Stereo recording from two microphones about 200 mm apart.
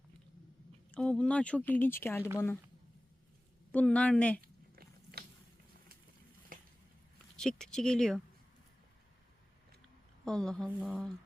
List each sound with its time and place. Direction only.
0.9 s speech: 5° left (ahead or behind)
3.7 s speech: 5° left (ahead or behind)
4.4 s a sound: 50° right (ahead or behind)
6.5 s a sound: 45° right (ahead or behind)
7.3 s speech: 5° left (ahead or behind)
10.2 s speech: 5° left (ahead or behind)